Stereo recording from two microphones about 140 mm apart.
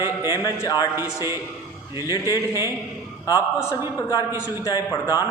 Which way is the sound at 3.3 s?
25° left (ahead or behind).